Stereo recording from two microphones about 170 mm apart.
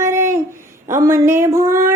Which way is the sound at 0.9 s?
15° right (ahead or behind).